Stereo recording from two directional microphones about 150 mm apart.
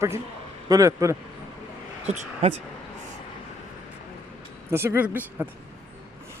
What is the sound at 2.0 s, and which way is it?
Speech, 45° right (ahead or behind).